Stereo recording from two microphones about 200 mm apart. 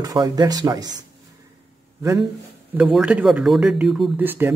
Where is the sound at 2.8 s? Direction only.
5° right (ahead or behind).